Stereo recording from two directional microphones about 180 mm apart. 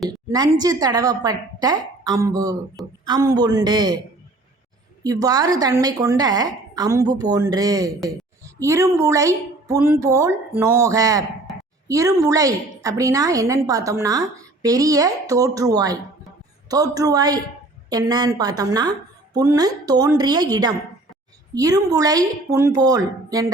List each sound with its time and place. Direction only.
0.3 s a woman's voice: 20° right (ahead or behind)
5.0 s a woman's voice: 20° right (ahead or behind)